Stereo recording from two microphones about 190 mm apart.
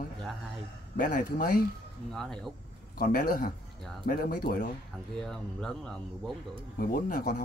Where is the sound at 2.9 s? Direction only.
45° left (ahead or behind).